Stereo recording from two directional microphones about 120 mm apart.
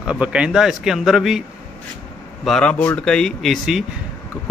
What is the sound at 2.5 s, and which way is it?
A man's voice, 10° left (ahead or behind).